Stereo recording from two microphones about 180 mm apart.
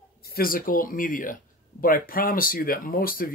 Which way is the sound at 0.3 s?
55° left (ahead or behind).